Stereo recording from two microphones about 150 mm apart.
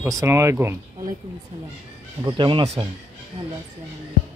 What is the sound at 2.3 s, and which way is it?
Speech, 35° right (ahead or behind).